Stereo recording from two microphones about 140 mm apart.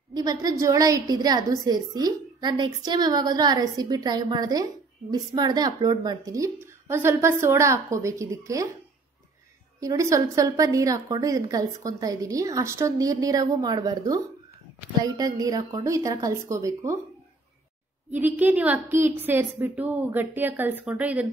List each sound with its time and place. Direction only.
0.1 s a woman's voice: 25° right (ahead or behind)
9.8 s a woman's voice: 25° right (ahead or behind)
18.1 s a woman's voice: 10° right (ahead or behind)